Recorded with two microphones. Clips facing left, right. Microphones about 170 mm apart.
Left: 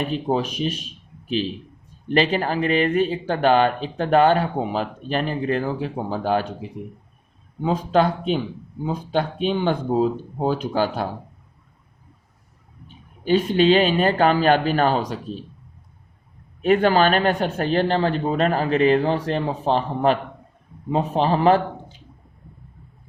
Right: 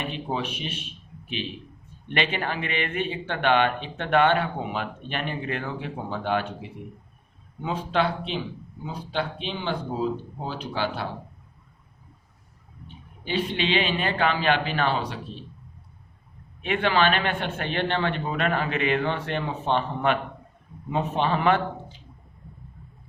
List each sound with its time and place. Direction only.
0.0 s speech: 40° left (ahead or behind)
13.2 s speech: 45° left (ahead or behind)
16.6 s speech: 40° left (ahead or behind)